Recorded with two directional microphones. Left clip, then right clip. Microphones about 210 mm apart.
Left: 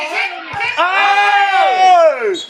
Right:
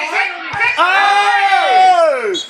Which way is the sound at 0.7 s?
50° right (ahead or behind).